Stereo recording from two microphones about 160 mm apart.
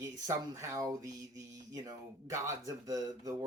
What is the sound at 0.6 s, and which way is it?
Speech, 20° right (ahead or behind).